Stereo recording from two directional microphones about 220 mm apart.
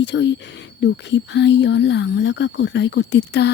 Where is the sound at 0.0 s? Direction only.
55° left (ahead or behind).